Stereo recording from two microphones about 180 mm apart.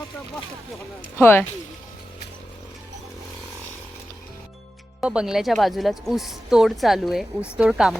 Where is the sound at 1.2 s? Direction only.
10° left (ahead or behind).